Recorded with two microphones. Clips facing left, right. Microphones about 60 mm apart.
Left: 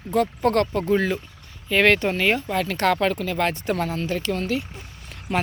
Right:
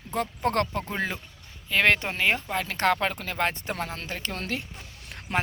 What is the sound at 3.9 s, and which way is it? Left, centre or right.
Speech, right.